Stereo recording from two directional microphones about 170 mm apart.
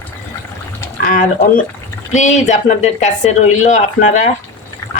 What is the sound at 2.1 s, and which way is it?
Speech, 45° left (ahead or behind).